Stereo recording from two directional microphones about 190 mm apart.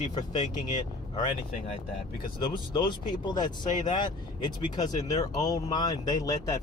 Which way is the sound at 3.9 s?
25° left (ahead or behind).